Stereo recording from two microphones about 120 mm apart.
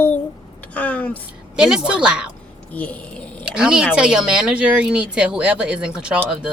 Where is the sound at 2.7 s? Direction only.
10° left (ahead or behind).